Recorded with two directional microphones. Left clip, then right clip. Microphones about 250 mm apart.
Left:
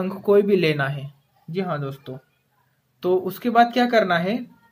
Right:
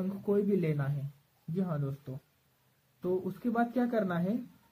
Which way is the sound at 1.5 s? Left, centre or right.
Centre.